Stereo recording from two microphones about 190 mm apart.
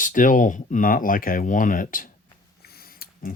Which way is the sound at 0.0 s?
45° left (ahead or behind).